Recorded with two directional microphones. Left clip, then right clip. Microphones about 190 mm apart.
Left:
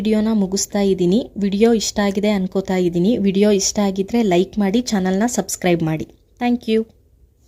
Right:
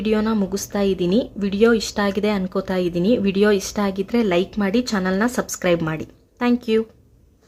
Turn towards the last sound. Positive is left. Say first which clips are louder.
# even
turn(degrees=35)  # may be behind; listen again after turning